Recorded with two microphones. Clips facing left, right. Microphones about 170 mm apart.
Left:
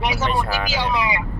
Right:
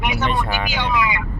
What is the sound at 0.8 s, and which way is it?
Speech, 35° left (ahead or behind).